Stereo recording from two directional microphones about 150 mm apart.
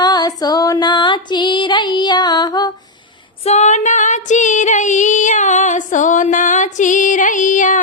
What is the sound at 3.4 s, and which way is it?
Female singing, 50° left (ahead or behind).